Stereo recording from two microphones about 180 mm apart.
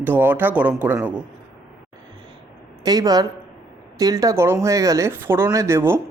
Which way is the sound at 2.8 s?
20° right (ahead or behind).